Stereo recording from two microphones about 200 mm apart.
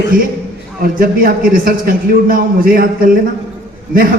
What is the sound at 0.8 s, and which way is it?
A man's voice, 45° right (ahead or behind).